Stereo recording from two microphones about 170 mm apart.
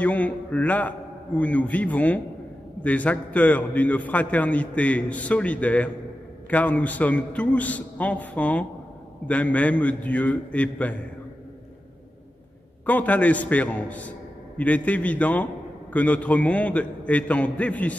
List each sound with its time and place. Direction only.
0.0 s a man's voice: 10° left (ahead or behind)
12.8 s a man's voice: 10° left (ahead or behind)